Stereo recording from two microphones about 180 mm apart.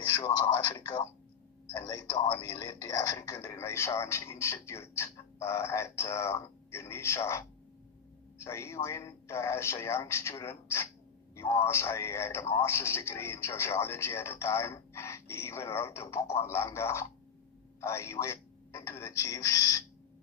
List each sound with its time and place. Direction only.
0.7 s a man's voice: 25° left (ahead or behind)
8.5 s a man's voice: 15° left (ahead or behind)